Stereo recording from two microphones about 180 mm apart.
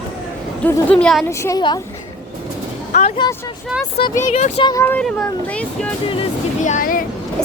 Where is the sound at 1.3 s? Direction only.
20° left (ahead or behind).